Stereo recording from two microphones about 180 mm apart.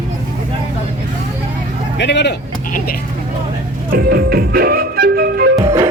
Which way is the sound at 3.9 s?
60° right (ahead or behind).